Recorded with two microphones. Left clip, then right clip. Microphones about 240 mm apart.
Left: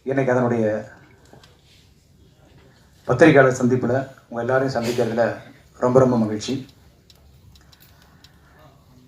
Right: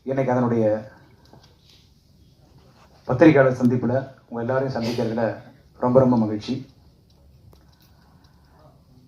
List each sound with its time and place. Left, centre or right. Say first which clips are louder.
0.0 s speech: left 2 dB; left
3.1 s speech: left 2 dB; left